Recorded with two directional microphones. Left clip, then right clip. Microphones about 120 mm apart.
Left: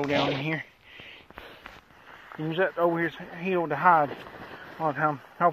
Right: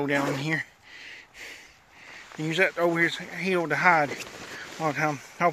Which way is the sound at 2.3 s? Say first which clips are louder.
Right 2 dB; 5° right (ahead or behind).